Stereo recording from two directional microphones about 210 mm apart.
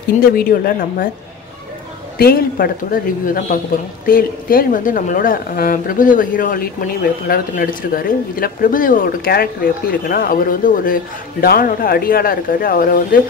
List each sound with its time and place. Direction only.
0.4 s speech: 45° left (ahead or behind)
2.1 s speech: 45° left (ahead or behind)